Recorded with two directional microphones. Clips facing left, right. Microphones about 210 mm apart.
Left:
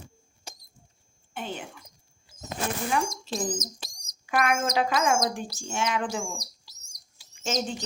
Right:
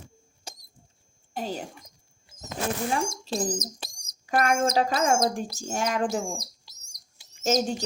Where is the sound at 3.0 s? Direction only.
30° right (ahead or behind).